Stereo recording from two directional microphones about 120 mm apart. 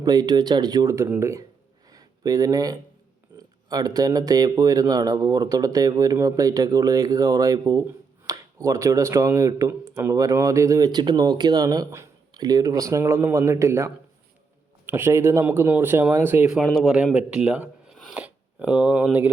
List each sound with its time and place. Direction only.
0.0 s speech: 35° right (ahead or behind)
1.9 s a sound: 30° right (ahead or behind)
3.7 s speech: 30° right (ahead or behind); by 16.6 s 15° right (ahead or behind)
16.6 s speech: centre (ahead or behind)